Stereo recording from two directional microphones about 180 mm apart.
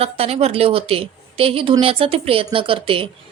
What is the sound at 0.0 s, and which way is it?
A woman's voice, 35° right (ahead or behind).